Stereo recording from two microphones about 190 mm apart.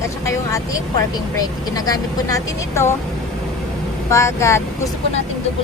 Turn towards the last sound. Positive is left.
turn(degrees=15)  # may be behind; listen again after turning